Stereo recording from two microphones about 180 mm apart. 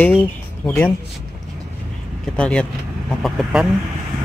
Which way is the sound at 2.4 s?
5° left (ahead or behind).